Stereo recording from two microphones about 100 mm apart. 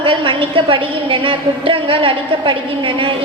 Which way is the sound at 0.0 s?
60° right (ahead or behind).